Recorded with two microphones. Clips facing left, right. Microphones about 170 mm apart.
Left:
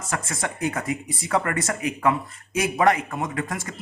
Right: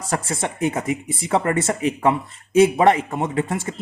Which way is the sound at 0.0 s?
30° right (ahead or behind).